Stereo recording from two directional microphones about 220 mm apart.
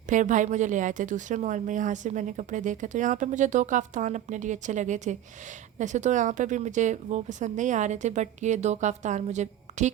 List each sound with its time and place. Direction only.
0.1 s a woman's voice: 35° right (ahead or behind)